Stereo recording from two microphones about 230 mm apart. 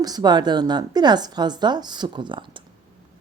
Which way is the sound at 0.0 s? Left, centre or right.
Centre.